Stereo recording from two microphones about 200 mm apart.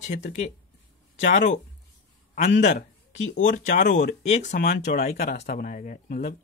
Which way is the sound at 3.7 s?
40° left (ahead or behind).